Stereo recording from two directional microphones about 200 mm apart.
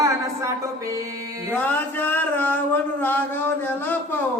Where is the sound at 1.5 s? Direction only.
10° left (ahead or behind).